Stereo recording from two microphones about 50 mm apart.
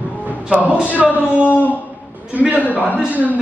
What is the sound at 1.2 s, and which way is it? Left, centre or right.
A man's voice, right.